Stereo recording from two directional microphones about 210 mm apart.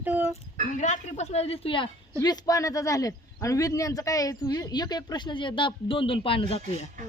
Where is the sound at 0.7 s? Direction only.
35° left (ahead or behind).